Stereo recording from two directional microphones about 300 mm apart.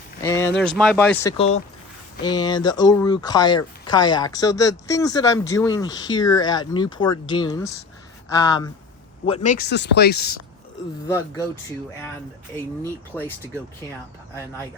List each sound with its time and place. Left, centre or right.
0.2 s speech: centre; by 10.3 s left
12.8 s speech: centre